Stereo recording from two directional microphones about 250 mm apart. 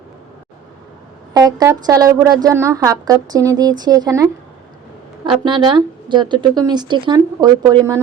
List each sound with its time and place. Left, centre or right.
1.3 s a woman's voice: centre